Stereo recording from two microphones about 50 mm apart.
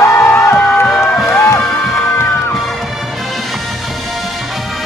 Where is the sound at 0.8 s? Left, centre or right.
Centre.